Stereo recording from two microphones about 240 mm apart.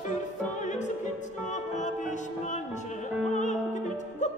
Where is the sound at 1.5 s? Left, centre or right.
Left.